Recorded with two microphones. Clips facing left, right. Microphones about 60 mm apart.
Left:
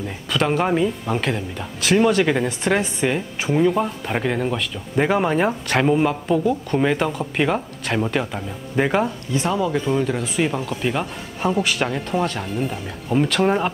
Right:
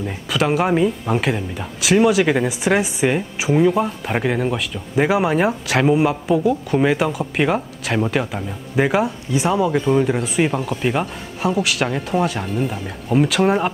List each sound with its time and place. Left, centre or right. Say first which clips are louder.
0.0 s speech: right 2 dB; centre